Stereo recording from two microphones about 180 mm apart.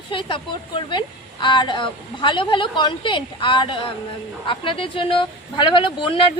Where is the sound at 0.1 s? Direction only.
30° left (ahead or behind).